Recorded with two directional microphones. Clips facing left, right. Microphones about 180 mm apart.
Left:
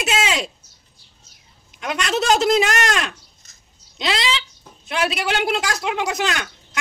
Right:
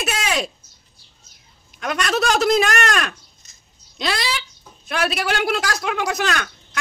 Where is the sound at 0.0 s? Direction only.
20° left (ahead or behind).